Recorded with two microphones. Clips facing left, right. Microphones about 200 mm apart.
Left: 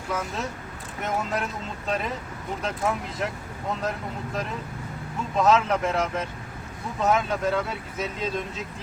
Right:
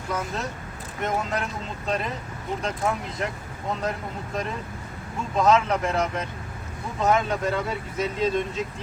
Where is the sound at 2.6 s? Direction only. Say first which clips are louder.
Even; 5° left (ahead or behind).